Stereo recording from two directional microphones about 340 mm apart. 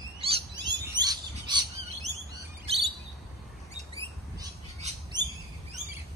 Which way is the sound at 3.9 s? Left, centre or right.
Centre.